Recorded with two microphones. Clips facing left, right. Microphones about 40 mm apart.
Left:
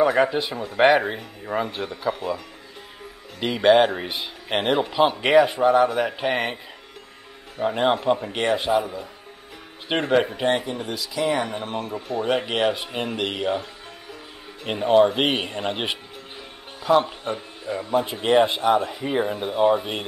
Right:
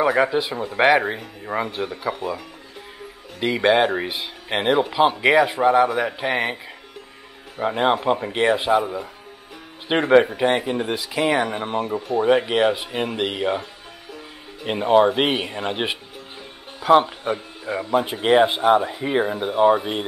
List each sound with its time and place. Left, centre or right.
0.0 s a man's voice: centre
9.8 s speech: centre; by 11.4 s right
11.4 s a man's voice: centre
17.2 s a man's voice: right
18.8 s a man's voice: centre